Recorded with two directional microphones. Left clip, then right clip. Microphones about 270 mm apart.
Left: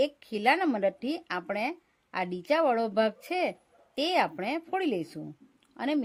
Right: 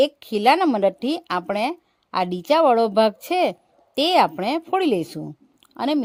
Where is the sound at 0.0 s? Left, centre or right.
Right.